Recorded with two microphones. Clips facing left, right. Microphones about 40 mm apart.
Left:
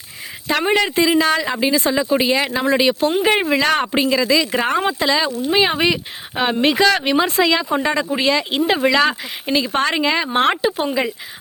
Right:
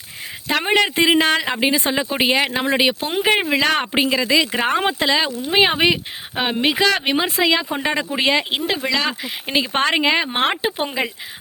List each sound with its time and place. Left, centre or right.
0.6 s speech: right
3.9 s speech: right
7.3 s speech: centre
8.9 s speech: centre
9.5 s speech: right